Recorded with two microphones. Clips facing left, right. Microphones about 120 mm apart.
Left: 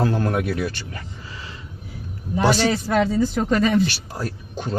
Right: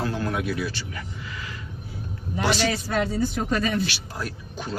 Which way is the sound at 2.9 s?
90° left.